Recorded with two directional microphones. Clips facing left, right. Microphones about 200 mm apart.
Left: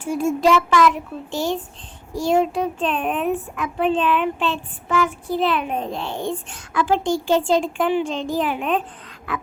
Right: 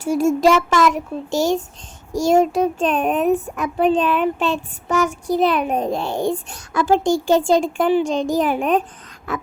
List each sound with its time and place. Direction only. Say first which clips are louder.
0.0 s child singing: right 4 dB; 40° right (ahead or behind)
0.4 s a child's voice: left 2 dB; 45° right (ahead or behind)
3.5 s child singing: right 3 dB; 40° right (ahead or behind)